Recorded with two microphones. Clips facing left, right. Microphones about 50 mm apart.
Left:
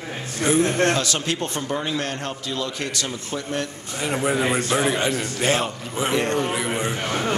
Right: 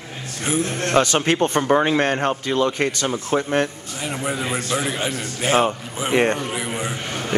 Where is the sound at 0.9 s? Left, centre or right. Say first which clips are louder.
Right 7 dB; right.